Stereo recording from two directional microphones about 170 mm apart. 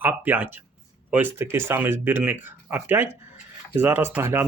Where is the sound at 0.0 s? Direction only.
10° right (ahead or behind).